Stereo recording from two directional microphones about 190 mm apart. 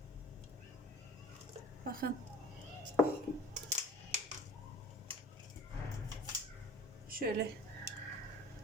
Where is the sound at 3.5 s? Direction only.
40° right (ahead or behind).